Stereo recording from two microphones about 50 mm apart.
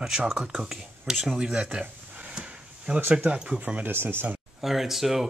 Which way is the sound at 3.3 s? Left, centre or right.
Centre.